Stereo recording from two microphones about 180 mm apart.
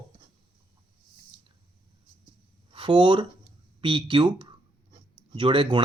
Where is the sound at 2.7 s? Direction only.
25° right (ahead or behind).